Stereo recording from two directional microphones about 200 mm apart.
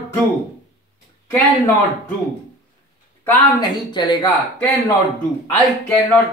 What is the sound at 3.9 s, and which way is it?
Speech, 20° left (ahead or behind).